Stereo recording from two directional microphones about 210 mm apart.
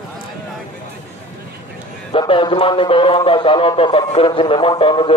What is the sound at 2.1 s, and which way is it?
A man's voice, 25° left (ahead or behind).